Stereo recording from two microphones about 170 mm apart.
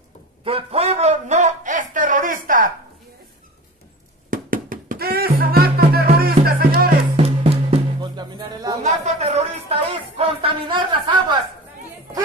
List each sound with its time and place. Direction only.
0.4 s a sound: 35° right (ahead or behind); by 2.7 s 55° right (ahead or behind)
4.3 s knock: 55° right (ahead or behind)
5.5 s music: 65° right (ahead or behind)
7.2 s music: 35° right (ahead or behind)